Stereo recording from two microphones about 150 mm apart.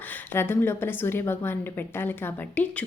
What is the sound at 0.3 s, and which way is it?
A woman's voice, 15° left (ahead or behind).